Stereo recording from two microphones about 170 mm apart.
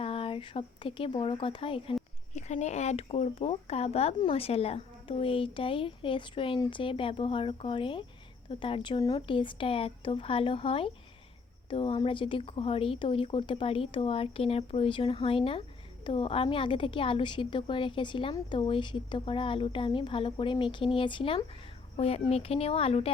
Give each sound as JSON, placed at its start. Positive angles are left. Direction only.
{"t": 0.0, "sound": "speech", "side_deg": 35}
{"t": 2.3, "sound": "speech", "side_deg": 45}